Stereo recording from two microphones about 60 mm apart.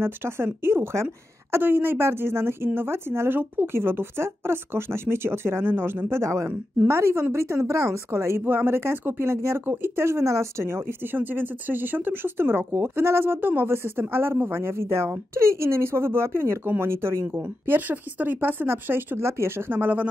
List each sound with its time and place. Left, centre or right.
0.0 s speech: right
11.1 s speech: right
17.4 s speech: right
19.2 s speech: right